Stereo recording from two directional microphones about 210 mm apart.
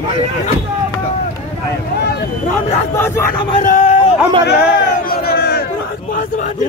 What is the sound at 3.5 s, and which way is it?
Speech, 35° left (ahead or behind).